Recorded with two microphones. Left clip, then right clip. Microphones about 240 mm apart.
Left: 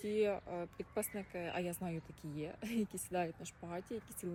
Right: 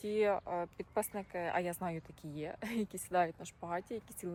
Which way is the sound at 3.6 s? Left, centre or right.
Right.